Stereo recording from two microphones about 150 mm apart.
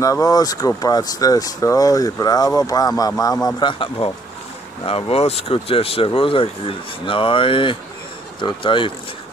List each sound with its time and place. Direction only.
0.0 s speech: 25° left (ahead or behind)